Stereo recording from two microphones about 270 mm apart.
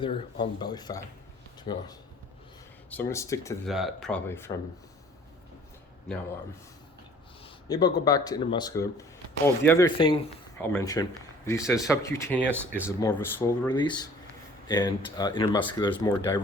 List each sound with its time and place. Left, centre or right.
0.0 s speech: centre
3.7 s speech: centre
7.4 s speech: centre
12.5 s speech: centre
13.0 s speech: centre